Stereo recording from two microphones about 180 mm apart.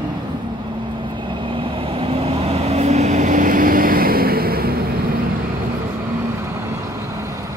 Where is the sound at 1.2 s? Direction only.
25° right (ahead or behind); by 4.8 s 55° right (ahead or behind).